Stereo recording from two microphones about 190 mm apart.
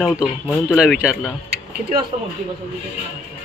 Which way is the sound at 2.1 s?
35° right (ahead or behind).